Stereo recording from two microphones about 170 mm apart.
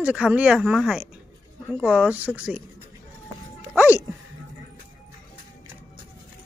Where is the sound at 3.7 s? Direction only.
10° right (ahead or behind).